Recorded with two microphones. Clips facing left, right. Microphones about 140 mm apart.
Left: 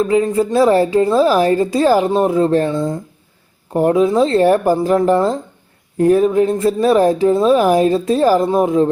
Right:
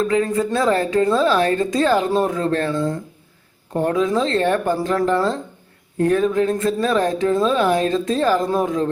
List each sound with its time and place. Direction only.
0.0 s a woman's voice: 30° left (ahead or behind)
2.7 s speech: 15° left (ahead or behind)
3.8 s a woman's voice: 30° left (ahead or behind)